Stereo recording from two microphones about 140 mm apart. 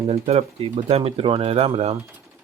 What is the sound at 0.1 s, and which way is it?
Speech, 50° right (ahead or behind).